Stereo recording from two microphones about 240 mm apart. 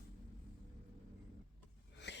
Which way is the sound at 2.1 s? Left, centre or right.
Left.